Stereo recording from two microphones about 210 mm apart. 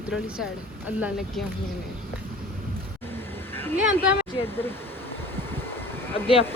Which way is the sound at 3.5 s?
10° left (ahead or behind).